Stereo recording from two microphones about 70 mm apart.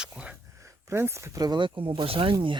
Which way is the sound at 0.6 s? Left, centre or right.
Right.